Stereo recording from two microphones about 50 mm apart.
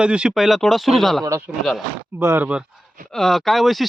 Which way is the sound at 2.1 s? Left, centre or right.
Right.